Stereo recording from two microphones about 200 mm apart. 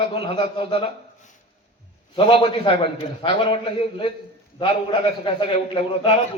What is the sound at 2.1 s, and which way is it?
A man's voice, 25° left (ahead or behind).